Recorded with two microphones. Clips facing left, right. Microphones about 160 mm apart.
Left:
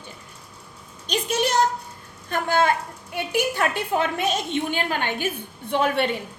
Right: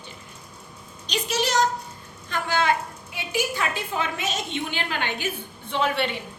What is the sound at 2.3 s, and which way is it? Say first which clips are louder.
A woman's voice: left 3 dB; 50° left (ahead or behind).